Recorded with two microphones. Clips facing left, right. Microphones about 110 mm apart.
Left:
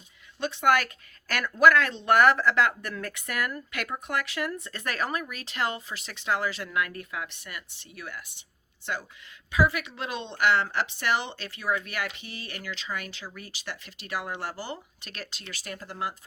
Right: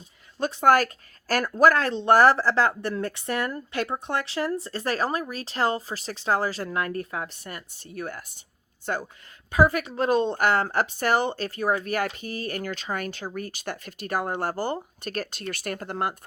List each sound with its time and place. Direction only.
0.3 s a woman's voice: 40° right (ahead or behind); by 16.1 s 55° right (ahead or behind)